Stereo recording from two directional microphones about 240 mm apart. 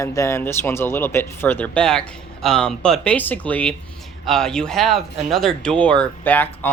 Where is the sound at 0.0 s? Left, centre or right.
Centre.